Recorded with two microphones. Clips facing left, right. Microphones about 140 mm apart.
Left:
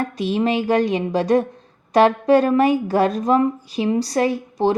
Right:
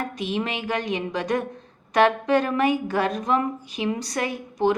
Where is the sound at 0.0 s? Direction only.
35° left (ahead or behind).